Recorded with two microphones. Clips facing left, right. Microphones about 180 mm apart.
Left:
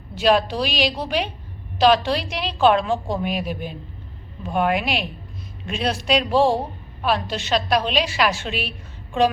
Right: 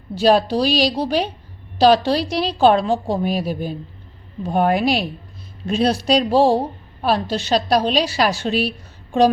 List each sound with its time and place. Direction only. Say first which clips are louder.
0.2 s a woman's voice: right 3 dB; 35° right (ahead or behind)